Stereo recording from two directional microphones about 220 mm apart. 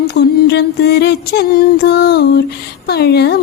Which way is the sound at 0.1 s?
50° left (ahead or behind).